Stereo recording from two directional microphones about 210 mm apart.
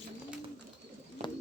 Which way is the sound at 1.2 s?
30° right (ahead or behind).